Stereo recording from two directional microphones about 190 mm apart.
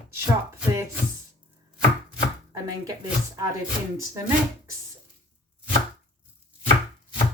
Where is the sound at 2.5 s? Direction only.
15° right (ahead or behind).